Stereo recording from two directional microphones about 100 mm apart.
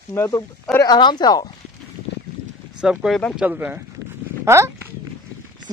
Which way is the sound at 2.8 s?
5° right (ahead or behind).